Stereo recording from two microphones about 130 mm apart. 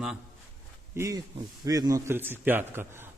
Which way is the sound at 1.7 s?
25° right (ahead or behind).